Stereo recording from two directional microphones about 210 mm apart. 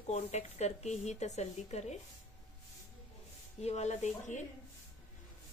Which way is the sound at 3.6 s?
30° left (ahead or behind).